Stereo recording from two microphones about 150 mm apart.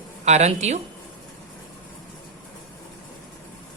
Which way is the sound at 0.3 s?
50° right (ahead or behind).